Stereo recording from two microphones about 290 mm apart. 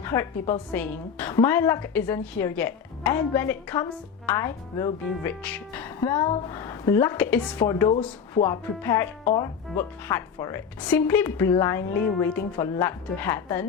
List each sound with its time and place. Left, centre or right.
0.7 s speech: centre